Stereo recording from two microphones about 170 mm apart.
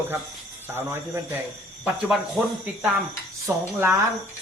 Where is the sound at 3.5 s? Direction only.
10° right (ahead or behind).